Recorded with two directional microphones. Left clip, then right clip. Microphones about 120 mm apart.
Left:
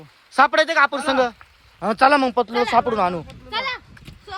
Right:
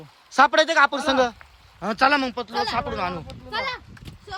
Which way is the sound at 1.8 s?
15° right (ahead or behind).